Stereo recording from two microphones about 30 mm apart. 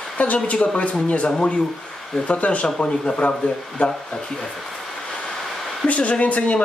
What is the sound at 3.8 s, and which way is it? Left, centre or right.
Speech, left.